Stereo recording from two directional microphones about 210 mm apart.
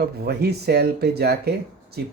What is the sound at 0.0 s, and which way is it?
Speech, 50° right (ahead or behind).